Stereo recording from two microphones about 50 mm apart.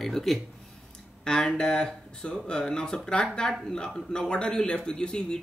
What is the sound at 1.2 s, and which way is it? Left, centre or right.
Speech, centre.